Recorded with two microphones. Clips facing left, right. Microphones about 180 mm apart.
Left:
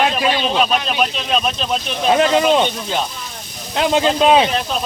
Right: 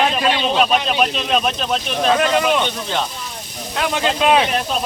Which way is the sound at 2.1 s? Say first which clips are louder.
Left 4 dB; 25° left (ahead or behind).